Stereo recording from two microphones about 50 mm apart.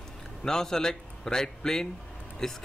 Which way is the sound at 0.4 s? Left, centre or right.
Centre.